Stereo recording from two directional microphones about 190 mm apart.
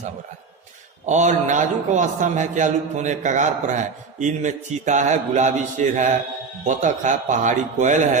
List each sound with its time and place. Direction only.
1.0 s a man's voice: 40° right (ahead or behind)